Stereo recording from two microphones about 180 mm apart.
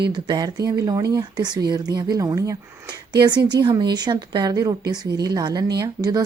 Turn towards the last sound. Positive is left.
turn(degrees=-20)  # may be behind; listen again after turning